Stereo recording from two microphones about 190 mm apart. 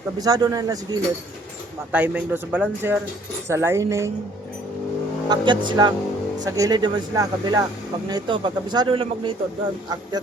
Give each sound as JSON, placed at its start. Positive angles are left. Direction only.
{"t": 0.2, "sound": "speech", "side_deg": -20}
{"t": 1.9, "sound": "a man's voice", "side_deg": -10}
{"t": 5.3, "sound": "speech", "side_deg": -25}